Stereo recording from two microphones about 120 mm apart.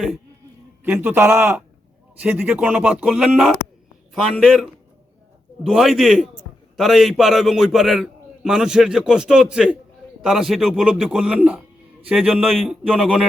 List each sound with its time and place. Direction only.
1.0 s a man's voice: 20° right (ahead or behind)